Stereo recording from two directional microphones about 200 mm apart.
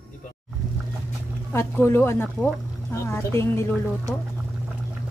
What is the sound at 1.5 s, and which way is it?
Speech, 10° left (ahead or behind).